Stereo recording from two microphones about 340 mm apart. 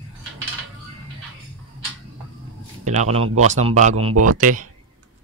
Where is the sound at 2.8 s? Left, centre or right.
Centre.